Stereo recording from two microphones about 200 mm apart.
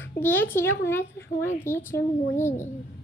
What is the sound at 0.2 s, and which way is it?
A child's voice, 10° left (ahead or behind).